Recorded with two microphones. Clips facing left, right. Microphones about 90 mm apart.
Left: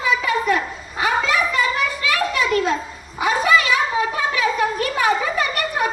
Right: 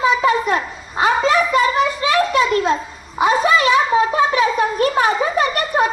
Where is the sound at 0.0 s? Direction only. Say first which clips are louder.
Right 4 dB; 30° right (ahead or behind).